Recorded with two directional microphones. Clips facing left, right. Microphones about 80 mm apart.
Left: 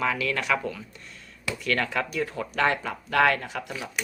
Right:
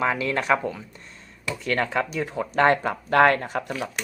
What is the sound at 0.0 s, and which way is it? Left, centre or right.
Speech, right.